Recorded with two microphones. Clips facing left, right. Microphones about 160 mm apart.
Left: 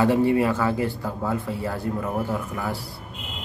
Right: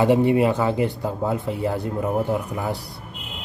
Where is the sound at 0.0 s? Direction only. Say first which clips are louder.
Right 2 dB; 20° right (ahead or behind).